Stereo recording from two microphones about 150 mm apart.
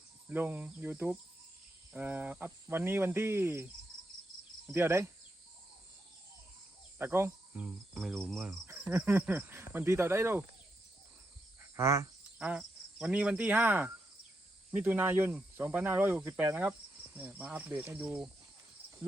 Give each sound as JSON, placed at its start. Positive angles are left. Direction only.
{"t": 0.3, "sound": "speech", "side_deg": -10}
{"t": 4.7, "sound": "speech", "side_deg": -15}
{"t": 7.0, "sound": "cricket", "side_deg": -15}
{"t": 8.9, "sound": "speech", "side_deg": -10}
{"t": 11.6, "sound": "cricket", "side_deg": -20}
{"t": 14.7, "sound": "speech", "side_deg": -10}